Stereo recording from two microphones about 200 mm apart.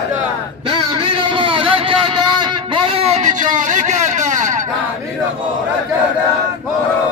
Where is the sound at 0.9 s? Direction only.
25° right (ahead or behind).